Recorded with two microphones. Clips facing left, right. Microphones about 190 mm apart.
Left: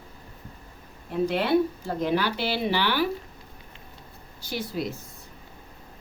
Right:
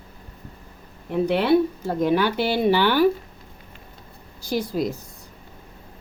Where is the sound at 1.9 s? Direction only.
50° right (ahead or behind).